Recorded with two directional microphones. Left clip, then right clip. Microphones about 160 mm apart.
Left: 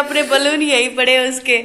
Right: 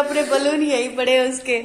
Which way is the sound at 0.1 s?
Centre (ahead or behind).